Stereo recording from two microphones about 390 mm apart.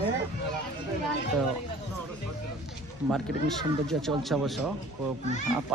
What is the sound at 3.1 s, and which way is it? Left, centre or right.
Speech, centre.